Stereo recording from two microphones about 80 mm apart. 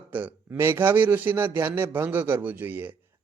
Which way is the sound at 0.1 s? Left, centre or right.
Right.